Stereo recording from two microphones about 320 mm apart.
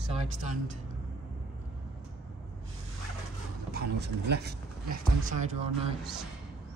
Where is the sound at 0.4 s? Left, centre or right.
Right.